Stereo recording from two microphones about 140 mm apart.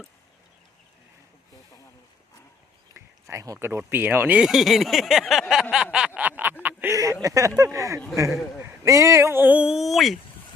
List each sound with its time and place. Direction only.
2.9 s speech: 20° right (ahead or behind); by 5.6 s centre (ahead or behind)
5.7 s a sound: 5° right (ahead or behind)
6.9 s speech: 25° right (ahead or behind); by 10.2 s centre (ahead or behind)